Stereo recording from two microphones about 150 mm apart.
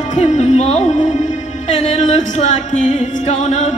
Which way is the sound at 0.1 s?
50° left (ahead or behind).